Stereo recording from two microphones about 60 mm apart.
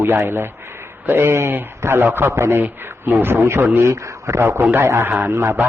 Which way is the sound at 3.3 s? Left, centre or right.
Right.